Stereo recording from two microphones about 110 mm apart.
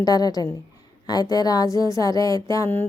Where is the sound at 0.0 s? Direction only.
35° left (ahead or behind).